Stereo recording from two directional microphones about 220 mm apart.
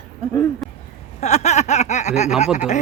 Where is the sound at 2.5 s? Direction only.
35° left (ahead or behind).